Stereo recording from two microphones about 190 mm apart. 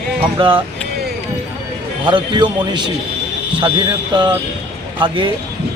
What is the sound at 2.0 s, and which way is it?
Speech, 25° right (ahead or behind).